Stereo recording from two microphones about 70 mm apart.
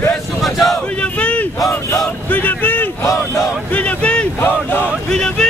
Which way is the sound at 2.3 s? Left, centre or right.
Left.